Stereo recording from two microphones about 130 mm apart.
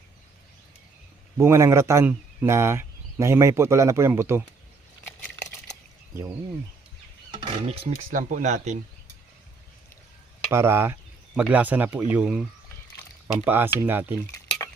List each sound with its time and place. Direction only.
1.4 s speech: 20° right (ahead or behind)
7.4 s speech: 50° right (ahead or behind)
8.1 s speech: 90° right; by 8.8 s 70° right (ahead or behind)
10.5 s speech: 20° right (ahead or behind)